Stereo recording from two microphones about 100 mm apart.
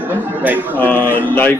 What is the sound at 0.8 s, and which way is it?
Speech, 20° left (ahead or behind).